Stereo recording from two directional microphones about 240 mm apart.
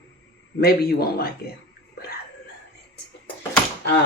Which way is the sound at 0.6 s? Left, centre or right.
Left.